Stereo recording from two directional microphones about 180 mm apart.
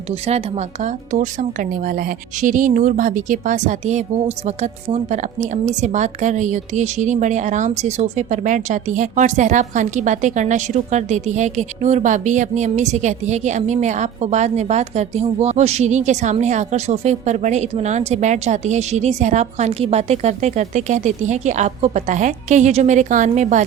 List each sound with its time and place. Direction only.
0.1 s a woman's voice: 35° right (ahead or behind)